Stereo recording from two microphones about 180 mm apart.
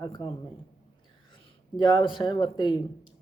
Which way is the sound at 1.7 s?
25° left (ahead or behind).